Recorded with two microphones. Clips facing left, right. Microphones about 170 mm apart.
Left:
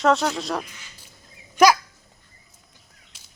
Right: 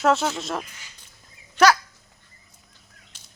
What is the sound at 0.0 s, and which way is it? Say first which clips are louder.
Speech: left 1 dB; 5° right (ahead or behind).